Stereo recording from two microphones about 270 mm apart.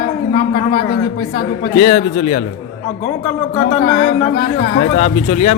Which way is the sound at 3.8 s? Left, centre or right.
Left.